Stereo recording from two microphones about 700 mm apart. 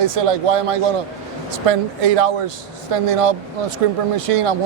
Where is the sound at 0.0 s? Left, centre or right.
Right.